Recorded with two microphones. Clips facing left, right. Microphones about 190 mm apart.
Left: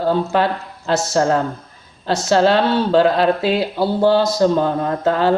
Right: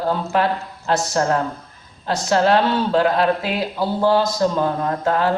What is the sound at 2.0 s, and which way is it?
A man's voice, 30° left (ahead or behind).